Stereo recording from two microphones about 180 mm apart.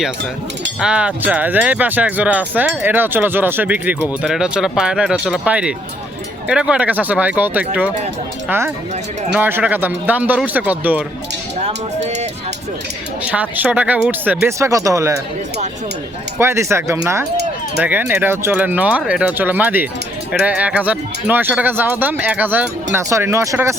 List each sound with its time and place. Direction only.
0.8 s speech: 5° right (ahead or behind)
12.0 s speech: 40° right (ahead or behind)
13.2 s speech: 10° right (ahead or behind)
16.4 s speech: 15° right (ahead or behind)